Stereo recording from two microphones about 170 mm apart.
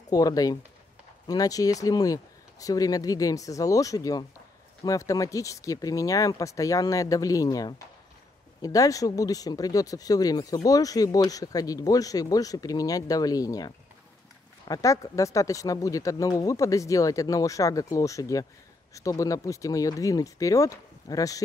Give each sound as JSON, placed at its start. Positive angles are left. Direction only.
{"t": 0.1, "sound": "speech", "side_deg": 20}